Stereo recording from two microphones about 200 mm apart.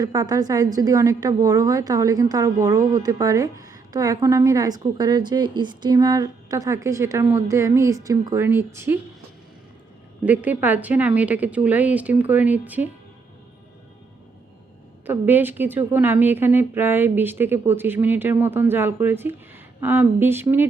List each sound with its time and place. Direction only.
0.0 s a woman's voice: 20° right (ahead or behind)
10.2 s a woman's voice: 10° right (ahead or behind)
15.0 s a woman's voice: 10° right (ahead or behind)